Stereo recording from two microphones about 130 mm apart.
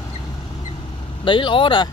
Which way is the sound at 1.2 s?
40° left (ahead or behind).